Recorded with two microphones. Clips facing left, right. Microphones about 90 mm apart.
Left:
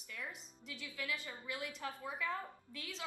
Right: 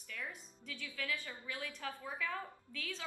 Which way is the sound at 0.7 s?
15° left (ahead or behind).